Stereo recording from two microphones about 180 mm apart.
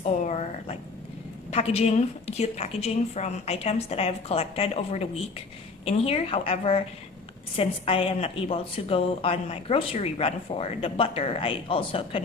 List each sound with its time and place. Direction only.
0.3 s a sound: 40° left (ahead or behind)
1.5 s a woman's voice: 35° left (ahead or behind)
6.1 s a woman's voice: 35° left (ahead or behind)